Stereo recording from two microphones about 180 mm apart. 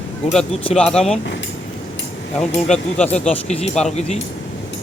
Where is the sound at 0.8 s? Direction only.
5° left (ahead or behind).